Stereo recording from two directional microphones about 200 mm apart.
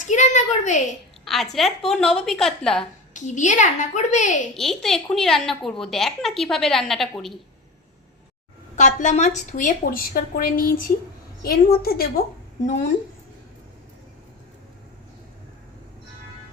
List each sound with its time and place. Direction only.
0.0 s a sound: 35° left (ahead or behind)
1.2 s a sound: centre (ahead or behind)
1.5 s a woman's voice: centre (ahead or behind)
3.1 s a woman's voice: 40° left (ahead or behind)
4.5 s a woman's voice: centre (ahead or behind)
8.7 s a woman's voice: 35° left (ahead or behind)